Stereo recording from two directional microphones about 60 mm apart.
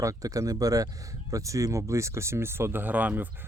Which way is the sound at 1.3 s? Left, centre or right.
Right.